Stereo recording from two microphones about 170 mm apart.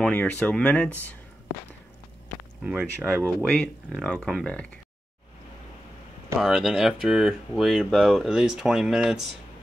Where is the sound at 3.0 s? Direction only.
5° left (ahead or behind).